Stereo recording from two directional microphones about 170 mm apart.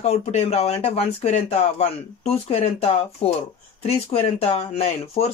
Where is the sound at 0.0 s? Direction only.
40° left (ahead or behind).